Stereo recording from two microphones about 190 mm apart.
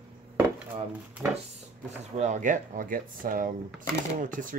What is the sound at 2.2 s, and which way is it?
Speech, 40° right (ahead or behind).